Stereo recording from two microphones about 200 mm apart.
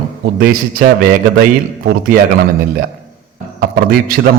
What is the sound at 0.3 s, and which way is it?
A man's voice, 45° right (ahead or behind).